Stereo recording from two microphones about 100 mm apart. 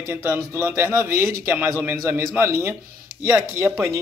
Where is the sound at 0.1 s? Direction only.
20° right (ahead or behind).